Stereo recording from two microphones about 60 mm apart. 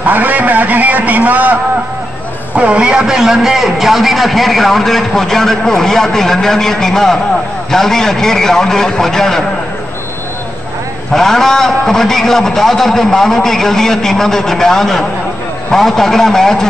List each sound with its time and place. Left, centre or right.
0.0 s a man's voice: right; by 9.4 s centre
11.1 s a man's voice: centre